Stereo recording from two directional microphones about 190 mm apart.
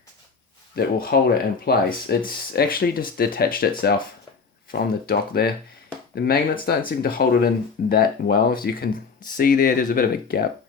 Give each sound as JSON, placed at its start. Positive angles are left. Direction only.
{"t": 0.8, "sound": "speech", "side_deg": 55}